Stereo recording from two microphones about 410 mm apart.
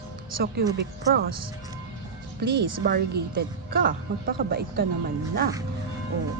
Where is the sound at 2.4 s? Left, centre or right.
Right.